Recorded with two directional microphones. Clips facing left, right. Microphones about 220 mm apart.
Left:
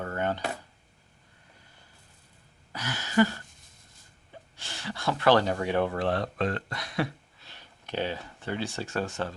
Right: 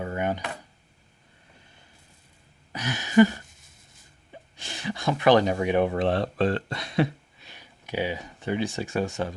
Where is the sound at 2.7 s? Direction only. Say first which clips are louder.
Right 6 dB; 20° right (ahead or behind).